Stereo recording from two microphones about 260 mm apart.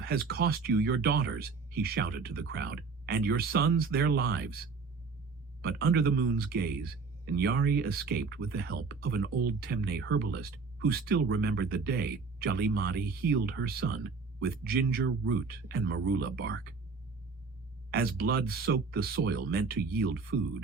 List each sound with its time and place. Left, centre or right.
0.0 s speech: right
5.6 s speech: right
17.9 s speech: right